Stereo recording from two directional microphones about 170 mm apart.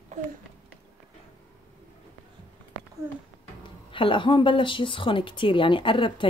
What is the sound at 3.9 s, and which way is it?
Speech, 30° left (ahead or behind).